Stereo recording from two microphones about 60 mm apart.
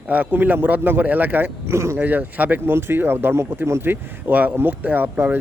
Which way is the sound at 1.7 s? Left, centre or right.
Right.